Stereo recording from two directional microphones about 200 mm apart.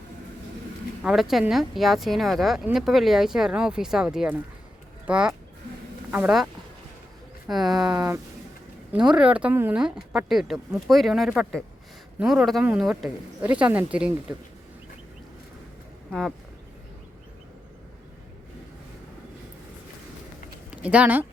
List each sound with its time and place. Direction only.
1.0 s speech: centre (ahead or behind)
7.9 s speech: 15° right (ahead or behind)
8.9 s speech: 5° right (ahead or behind)
20.8 s speech: 5° right (ahead or behind)